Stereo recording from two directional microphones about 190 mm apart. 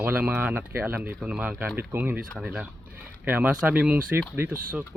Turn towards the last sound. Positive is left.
turn(degrees=-10)  # may be behind; listen again after turning